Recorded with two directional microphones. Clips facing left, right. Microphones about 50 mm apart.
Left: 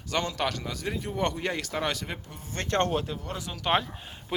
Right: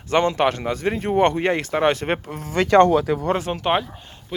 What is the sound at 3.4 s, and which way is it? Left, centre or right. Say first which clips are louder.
Speech: right 12 dB; right.